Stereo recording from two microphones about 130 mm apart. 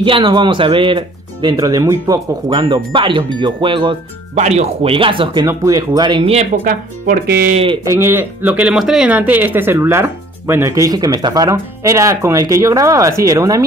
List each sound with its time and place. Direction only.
0.0 s speech: 40° right (ahead or behind)
4.4 s speech: 60° right (ahead or behind)
4.9 s speech: 40° right (ahead or behind)
5.5 s speech: 25° right (ahead or behind)
6.6 s speech: 90° right
7.5 s speech: 45° right (ahead or behind)
7.9 s speech: 20° right (ahead or behind)